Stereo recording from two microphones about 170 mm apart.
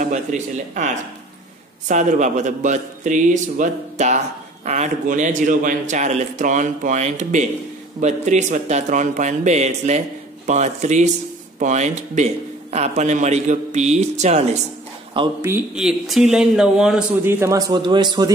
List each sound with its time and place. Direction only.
0.0 s a man's voice: 45° right (ahead or behind)
15.2 s a man's voice: 30° right (ahead or behind)
15.7 s a man's voice: centre (ahead or behind); by 18.3 s 25° right (ahead or behind)